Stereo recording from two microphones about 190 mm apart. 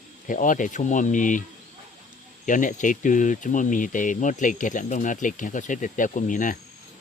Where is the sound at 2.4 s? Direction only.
45° left (ahead or behind).